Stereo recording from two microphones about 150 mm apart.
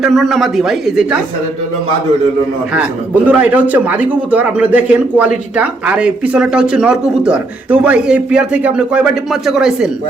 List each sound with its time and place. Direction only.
0.0 s speech: centre (ahead or behind)
3.2 s a man's voice: 10° right (ahead or behind)